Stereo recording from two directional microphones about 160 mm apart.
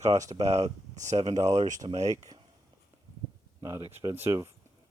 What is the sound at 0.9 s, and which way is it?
Speech, 50° right (ahead or behind).